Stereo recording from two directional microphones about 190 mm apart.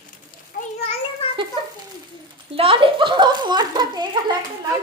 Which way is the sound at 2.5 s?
30° right (ahead or behind).